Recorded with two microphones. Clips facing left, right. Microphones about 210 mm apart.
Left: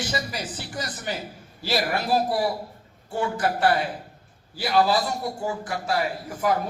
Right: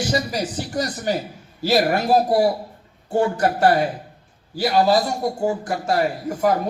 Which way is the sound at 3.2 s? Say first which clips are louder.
Right 6 dB; 45° right (ahead or behind).